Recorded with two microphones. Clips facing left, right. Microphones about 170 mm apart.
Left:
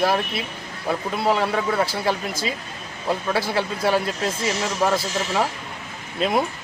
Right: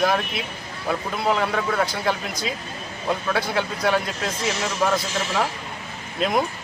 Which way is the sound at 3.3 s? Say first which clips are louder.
Left 1 dB; centre (ahead or behind).